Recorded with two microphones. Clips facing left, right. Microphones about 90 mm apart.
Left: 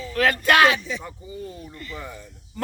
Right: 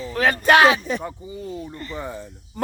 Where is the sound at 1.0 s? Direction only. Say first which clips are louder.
Right 3 dB; 20° right (ahead or behind).